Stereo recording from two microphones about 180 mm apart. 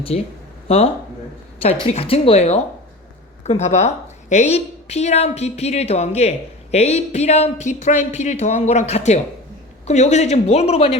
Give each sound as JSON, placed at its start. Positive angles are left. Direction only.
{"t": 0.1, "sound": "a woman's voice", "side_deg": 35}
{"t": 1.6, "sound": "a woman's voice", "side_deg": 35}